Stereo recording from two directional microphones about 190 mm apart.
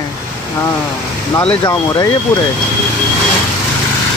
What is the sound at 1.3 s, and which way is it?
Speech, 15° left (ahead or behind).